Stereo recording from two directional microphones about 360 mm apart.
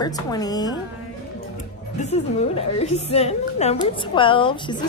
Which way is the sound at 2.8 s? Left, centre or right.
Centre.